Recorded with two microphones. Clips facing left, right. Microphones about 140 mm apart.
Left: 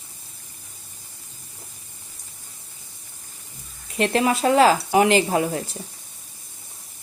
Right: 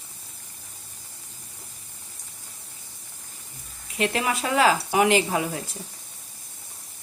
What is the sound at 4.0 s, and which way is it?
Speech, 35° left (ahead or behind).